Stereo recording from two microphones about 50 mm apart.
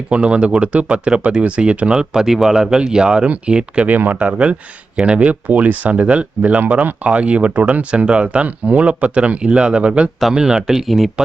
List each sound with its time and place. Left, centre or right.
0.1 s speech: right
3.8 s speech: right
10.3 s speech: centre